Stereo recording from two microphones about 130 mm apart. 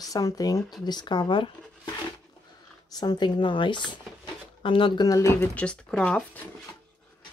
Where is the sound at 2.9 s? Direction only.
30° left (ahead or behind).